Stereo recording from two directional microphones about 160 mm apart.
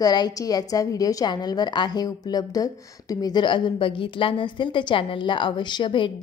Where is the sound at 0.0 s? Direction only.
25° left (ahead or behind).